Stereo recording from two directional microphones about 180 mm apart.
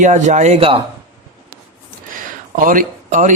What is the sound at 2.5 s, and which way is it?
Speech, 50° right (ahead or behind).